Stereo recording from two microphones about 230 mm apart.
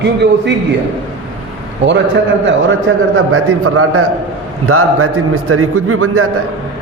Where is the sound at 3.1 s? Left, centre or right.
Right.